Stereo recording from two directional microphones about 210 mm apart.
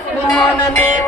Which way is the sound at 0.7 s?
10° left (ahead or behind).